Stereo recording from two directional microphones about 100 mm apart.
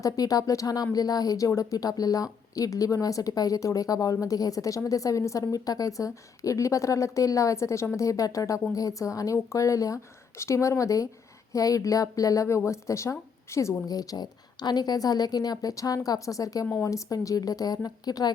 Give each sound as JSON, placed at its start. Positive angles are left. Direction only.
{"t": 0.0, "sound": "speech", "side_deg": 35}